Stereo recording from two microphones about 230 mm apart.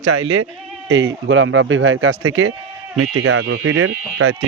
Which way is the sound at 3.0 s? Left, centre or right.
Right.